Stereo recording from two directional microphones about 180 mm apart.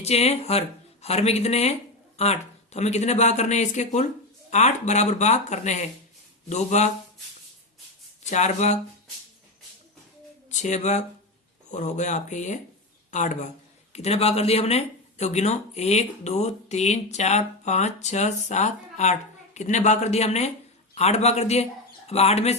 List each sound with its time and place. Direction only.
0.0 s speech: 35° left (ahead or behind)
8.2 s speech: 40° left (ahead or behind)
10.5 s speech: 40° left (ahead or behind)